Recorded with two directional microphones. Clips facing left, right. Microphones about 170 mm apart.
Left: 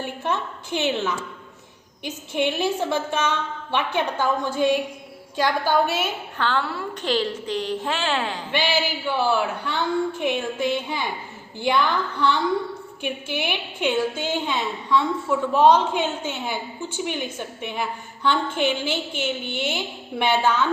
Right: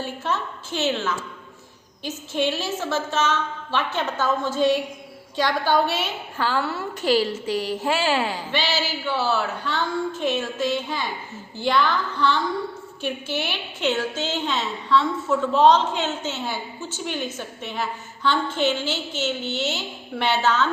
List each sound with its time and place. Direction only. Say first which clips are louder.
0.0 s a woman's voice: left 1 dB; 15° left (ahead or behind)
6.3 s a woman's voice: right 1 dB; 5° right (ahead or behind)
8.5 s a woman's voice: left 4 dB; 15° left (ahead or behind)